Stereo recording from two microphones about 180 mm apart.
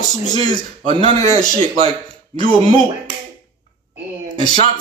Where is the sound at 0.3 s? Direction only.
20° left (ahead or behind).